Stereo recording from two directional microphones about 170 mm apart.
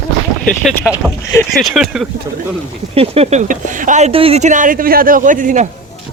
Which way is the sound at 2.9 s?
35° right (ahead or behind).